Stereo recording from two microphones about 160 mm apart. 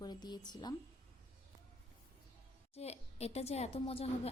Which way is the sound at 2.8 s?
40° left (ahead or behind).